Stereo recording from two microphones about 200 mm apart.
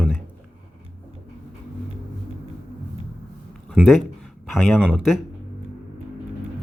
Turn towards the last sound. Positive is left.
turn(degrees=-5)  # may be behind; listen again after turning